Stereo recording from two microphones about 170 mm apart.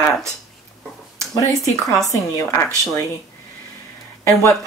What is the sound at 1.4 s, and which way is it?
Speech, 20° left (ahead or behind).